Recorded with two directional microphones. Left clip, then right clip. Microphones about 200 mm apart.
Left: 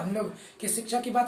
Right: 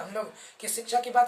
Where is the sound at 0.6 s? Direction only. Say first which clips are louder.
Right 2 dB; 15° right (ahead or behind).